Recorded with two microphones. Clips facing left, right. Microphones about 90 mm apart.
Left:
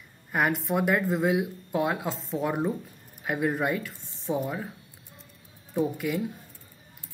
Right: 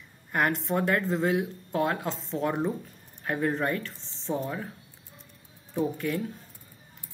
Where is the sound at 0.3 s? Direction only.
5° left (ahead or behind).